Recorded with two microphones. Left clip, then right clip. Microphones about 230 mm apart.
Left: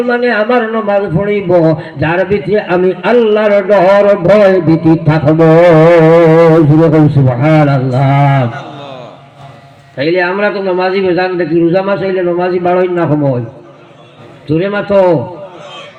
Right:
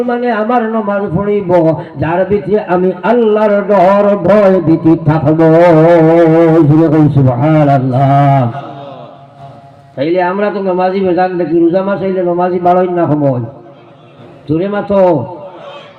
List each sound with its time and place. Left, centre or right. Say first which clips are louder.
0.1 s a man's voice: left 3 dB; right
10.0 s a man's voice: left 1 dB; right
14.4 s a man's voice: left 1 dB; right